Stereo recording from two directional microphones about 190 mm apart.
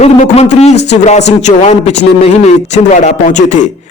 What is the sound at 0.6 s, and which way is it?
A man's voice, 35° left (ahead or behind).